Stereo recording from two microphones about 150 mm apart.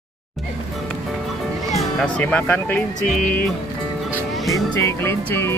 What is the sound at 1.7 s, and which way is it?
Speech, 5° left (ahead or behind).